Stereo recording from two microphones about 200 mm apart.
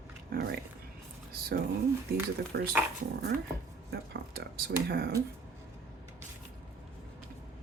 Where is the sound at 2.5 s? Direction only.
55° right (ahead or behind).